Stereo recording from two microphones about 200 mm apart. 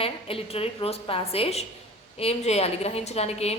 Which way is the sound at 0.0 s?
30° left (ahead or behind).